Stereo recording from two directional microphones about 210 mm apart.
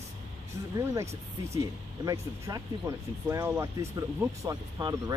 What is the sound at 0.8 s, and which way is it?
Speech, 15° right (ahead or behind).